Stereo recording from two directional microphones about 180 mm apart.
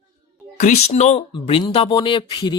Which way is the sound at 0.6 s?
40° left (ahead or behind).